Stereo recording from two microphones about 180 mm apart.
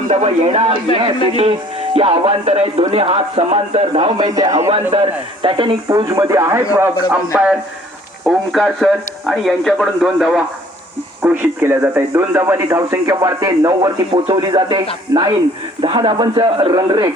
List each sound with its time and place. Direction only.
0.1 s speech: 35° right (ahead or behind); by 4.7 s 20° right (ahead or behind)
4.7 s speech: 30° right (ahead or behind); by 10.4 s centre (ahead or behind)
11.2 s speech: 10° right (ahead or behind)